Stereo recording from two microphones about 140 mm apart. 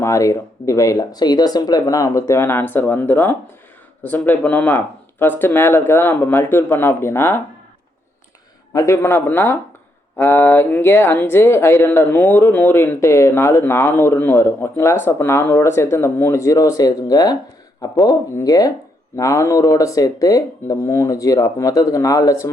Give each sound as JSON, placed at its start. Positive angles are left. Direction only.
{"t": 0.0, "sound": "speech", "side_deg": 20}
{"t": 8.7, "sound": "speech", "side_deg": 20}